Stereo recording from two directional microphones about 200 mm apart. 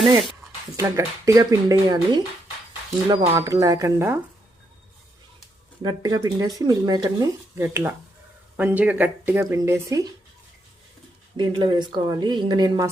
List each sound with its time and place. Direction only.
0.8 s speech: 15° right (ahead or behind)
5.8 s speech: 20° right (ahead or behind)
11.3 s speech: 25° right (ahead or behind)